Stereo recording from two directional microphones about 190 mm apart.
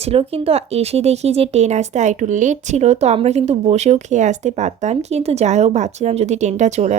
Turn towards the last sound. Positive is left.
turn(degrees=-35)  # may be behind; listen again after turning